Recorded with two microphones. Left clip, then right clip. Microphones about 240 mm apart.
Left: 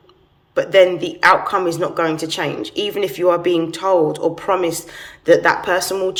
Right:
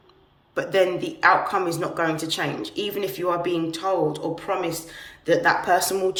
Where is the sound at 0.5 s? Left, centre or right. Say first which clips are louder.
Left 9 dB; centre.